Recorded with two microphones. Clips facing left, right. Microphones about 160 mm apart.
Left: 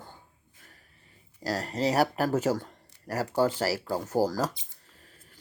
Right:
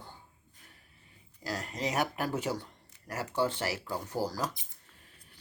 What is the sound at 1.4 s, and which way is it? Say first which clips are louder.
Speech: left 7 dB; 40° left (ahead or behind).